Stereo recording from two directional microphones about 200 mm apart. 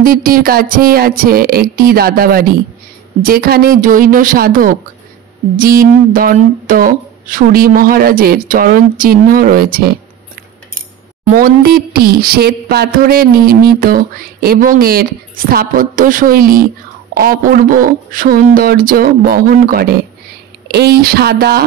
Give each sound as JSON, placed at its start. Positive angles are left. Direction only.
{"t": 0.0, "sound": "speech", "side_deg": -45}
{"t": 11.2, "sound": "speech", "side_deg": -45}